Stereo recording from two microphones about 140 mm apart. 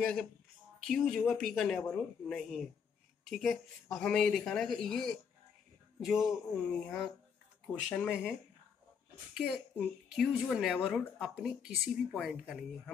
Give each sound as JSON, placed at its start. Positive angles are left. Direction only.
{"t": 0.0, "sound": "speech", "side_deg": 5}
{"t": 9.3, "sound": "speech", "side_deg": -5}